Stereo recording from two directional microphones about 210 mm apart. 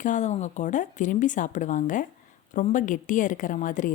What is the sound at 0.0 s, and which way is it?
Speech, 35° left (ahead or behind).